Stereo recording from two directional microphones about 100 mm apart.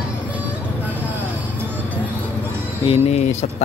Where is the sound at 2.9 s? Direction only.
90° left.